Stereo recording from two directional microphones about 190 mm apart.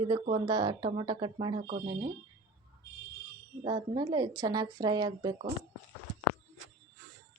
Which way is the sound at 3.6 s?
20° right (ahead or behind).